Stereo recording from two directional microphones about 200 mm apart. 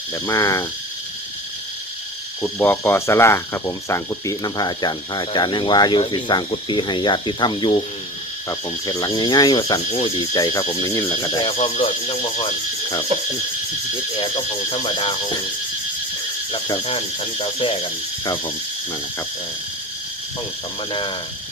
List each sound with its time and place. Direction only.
0.1 s speech: 15° left (ahead or behind)
2.4 s speech: 10° left (ahead or behind)
11.3 s speech: 25° left (ahead or behind)
14.2 s speech: 20° left (ahead or behind)
16.5 s speech: 25° left (ahead or behind)
20.9 s speech: 25° left (ahead or behind)